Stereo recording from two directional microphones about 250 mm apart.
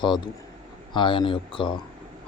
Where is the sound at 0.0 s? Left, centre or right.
Centre.